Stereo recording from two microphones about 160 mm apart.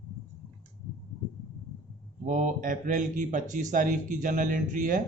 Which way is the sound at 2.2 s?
55° right (ahead or behind).